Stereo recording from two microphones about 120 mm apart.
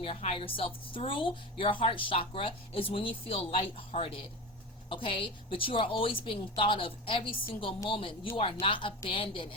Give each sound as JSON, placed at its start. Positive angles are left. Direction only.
{"t": 0.0, "sound": "a woman's voice", "side_deg": 50}